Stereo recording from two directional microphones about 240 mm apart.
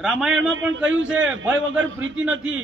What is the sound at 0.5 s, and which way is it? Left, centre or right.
A man's voice, right.